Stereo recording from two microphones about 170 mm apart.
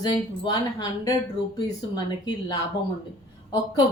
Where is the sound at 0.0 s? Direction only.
25° left (ahead or behind).